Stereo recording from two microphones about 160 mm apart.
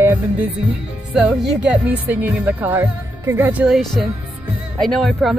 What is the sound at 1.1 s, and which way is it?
A woman's voice, 5° right (ahead or behind).